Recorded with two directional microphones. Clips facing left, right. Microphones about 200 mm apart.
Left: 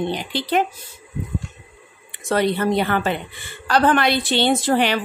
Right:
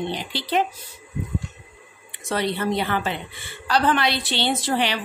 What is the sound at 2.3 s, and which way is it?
A woman's voice, 50° left (ahead or behind).